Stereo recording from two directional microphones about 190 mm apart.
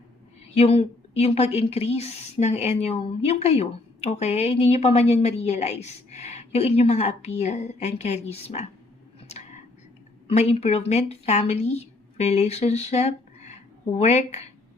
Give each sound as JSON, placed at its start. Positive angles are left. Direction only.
{"t": 0.5, "sound": "a woman's voice", "side_deg": 30}
{"t": 10.2, "sound": "a woman's voice", "side_deg": 35}